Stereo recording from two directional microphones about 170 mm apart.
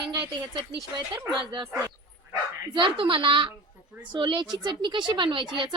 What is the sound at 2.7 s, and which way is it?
Speech, 30° right (ahead or behind).